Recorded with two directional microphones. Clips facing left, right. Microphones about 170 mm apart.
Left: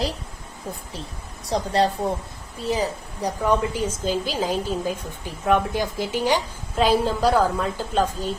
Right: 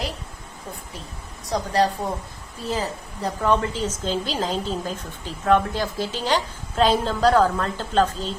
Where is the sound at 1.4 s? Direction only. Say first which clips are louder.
Even; 30° left (ahead or behind).